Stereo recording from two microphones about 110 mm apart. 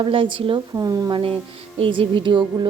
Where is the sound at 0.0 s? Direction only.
50° right (ahead or behind).